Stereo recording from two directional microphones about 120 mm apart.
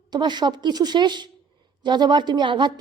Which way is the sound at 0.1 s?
35° right (ahead or behind).